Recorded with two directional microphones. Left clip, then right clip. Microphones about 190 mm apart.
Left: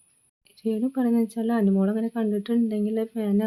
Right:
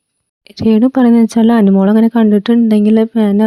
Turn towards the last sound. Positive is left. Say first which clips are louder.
# right 14 dB
turn(degrees=-50)  # may be behind; listen again after turning